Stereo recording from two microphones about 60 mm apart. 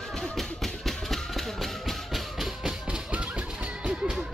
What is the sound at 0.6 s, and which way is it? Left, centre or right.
Music, centre.